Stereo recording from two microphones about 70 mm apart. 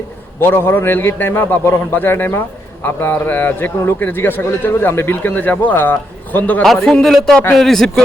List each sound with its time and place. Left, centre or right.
0.3 s a man's voice: left
6.6 s a man's voice: centre